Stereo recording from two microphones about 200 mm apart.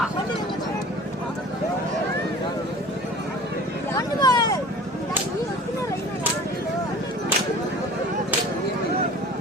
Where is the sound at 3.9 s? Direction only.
20° left (ahead or behind).